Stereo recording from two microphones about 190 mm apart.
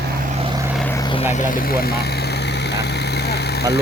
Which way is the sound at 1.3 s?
50° left (ahead or behind).